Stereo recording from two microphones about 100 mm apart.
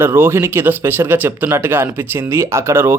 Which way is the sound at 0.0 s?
25° right (ahead or behind).